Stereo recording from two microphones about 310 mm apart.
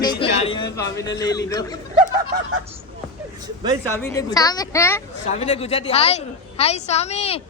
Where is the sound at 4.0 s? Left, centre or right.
Centre.